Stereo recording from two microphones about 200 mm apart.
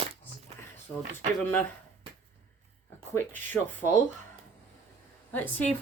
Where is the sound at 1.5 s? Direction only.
10° left (ahead or behind).